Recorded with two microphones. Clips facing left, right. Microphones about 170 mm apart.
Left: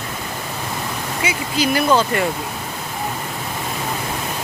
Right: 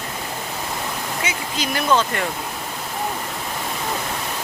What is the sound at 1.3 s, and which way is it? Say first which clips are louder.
Speech: left 10 dB; 10° left (ahead or behind).